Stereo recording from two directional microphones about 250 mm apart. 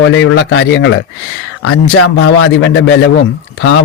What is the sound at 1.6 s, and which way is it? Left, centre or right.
Speech, left.